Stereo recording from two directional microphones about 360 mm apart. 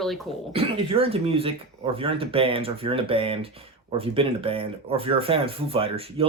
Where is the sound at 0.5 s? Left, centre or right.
Centre.